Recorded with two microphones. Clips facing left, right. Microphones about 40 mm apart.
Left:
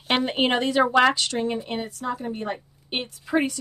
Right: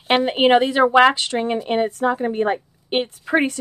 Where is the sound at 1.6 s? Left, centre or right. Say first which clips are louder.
Right 10 dB; right.